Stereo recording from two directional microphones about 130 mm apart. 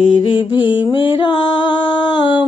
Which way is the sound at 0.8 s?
40° left (ahead or behind).